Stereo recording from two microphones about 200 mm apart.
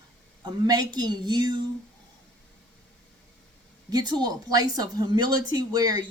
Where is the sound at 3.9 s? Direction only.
20° right (ahead or behind).